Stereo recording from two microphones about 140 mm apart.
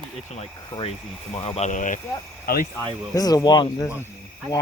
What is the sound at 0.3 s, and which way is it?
Speech, 50° left (ahead or behind).